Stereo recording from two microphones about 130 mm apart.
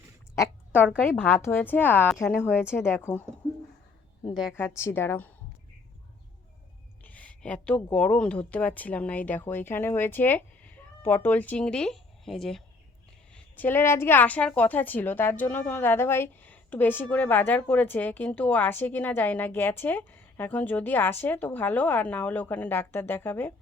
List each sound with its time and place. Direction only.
1.0 s a woman's voice: 15° left (ahead or behind)
4.5 s a woman's voice: 20° left (ahead or behind)
7.0 s a woman's voice: 10° left (ahead or behind)
13.3 s a woman's voice: 15° left (ahead or behind)